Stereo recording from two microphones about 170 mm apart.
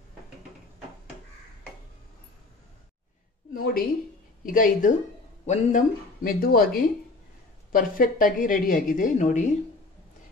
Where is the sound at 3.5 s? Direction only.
60° left (ahead or behind).